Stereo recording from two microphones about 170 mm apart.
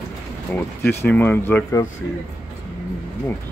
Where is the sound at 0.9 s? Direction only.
10° left (ahead or behind).